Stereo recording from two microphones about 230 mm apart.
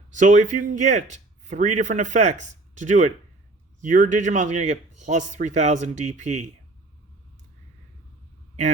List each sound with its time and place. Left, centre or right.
0.1 s speech: right